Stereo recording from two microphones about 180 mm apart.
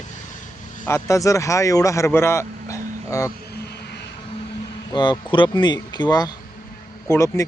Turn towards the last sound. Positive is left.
turn(degrees=15)  # may be behind; listen again after turning